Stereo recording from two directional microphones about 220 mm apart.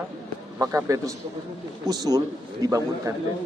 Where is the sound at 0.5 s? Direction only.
15° right (ahead or behind).